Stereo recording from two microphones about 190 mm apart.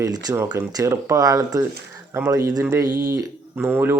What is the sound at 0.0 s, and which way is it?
Speech, 20° right (ahead or behind).